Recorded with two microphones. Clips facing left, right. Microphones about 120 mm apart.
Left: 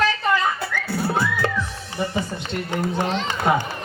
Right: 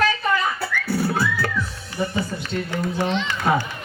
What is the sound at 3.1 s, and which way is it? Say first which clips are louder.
Speech: even; 40° left (ahead or behind).